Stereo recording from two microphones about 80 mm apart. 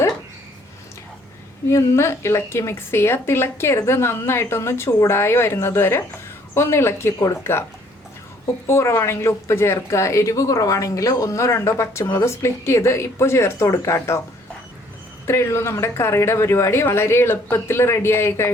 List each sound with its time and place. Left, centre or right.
1.7 s a woman's voice: left
8.6 s a woman's voice: left
15.3 s a woman's voice: left